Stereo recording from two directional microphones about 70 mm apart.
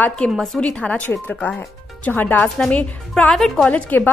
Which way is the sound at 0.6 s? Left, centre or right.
Centre.